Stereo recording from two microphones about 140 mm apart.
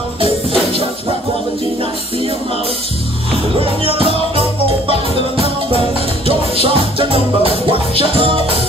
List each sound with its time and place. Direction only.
3.5 s music: 40° right (ahead or behind)
6.2 s music: 40° right (ahead or behind)